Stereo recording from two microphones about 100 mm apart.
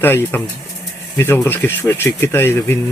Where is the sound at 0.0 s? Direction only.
20° left (ahead or behind).